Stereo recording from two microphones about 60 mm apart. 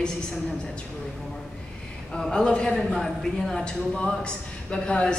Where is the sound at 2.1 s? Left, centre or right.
Centre.